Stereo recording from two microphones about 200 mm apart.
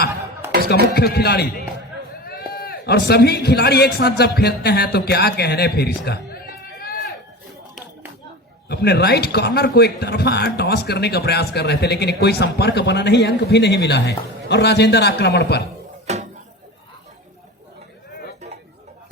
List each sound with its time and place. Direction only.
0.9 s a man's voice: 55° left (ahead or behind)
8.7 s speech: 55° left (ahead or behind)
16.1 s a sound: 35° right (ahead or behind)